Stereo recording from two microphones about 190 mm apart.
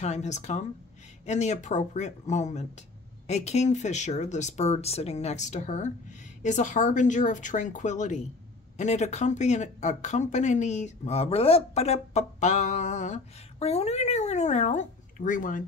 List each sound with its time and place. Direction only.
0.0 s speech: 35° left (ahead or behind)